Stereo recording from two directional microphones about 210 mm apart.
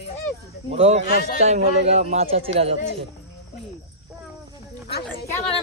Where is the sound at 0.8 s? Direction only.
30° right (ahead or behind).